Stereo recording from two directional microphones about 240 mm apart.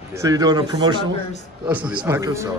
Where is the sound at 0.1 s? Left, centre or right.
Centre.